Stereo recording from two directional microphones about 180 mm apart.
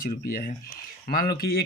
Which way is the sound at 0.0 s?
50° left (ahead or behind).